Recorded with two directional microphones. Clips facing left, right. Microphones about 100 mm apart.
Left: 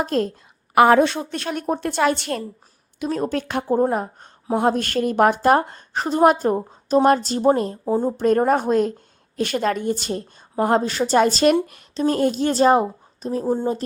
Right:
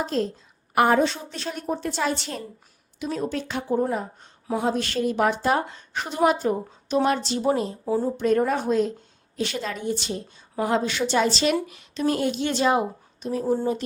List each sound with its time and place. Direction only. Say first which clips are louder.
0.0 s a woman's voice: left 4 dB; 55° left (ahead or behind)
0.7 s a woman's voice: left 5 dB; 90° left; by 2.4 s 60° left (ahead or behind)
3.0 s a woman's voice: left 4 dB; 50° left (ahead or behind)